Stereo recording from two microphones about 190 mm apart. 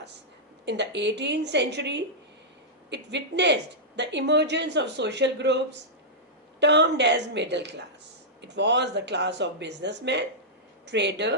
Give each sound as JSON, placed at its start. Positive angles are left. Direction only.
{"t": 0.6, "sound": "a woman's voice", "side_deg": -65}
{"t": 6.6, "sound": "a woman's voice", "side_deg": -65}